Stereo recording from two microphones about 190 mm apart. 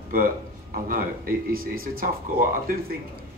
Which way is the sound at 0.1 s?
50° right (ahead or behind).